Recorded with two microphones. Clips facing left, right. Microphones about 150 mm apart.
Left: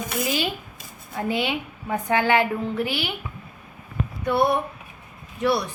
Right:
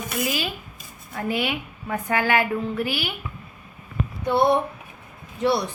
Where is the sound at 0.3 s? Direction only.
25° left (ahead or behind).